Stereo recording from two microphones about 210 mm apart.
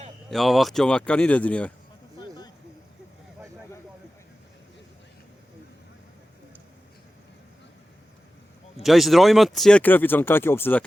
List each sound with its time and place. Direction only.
0.3 s speech: centre (ahead or behind)
2.1 s vehicle: 20° left (ahead or behind)
8.8 s speech: centre (ahead or behind)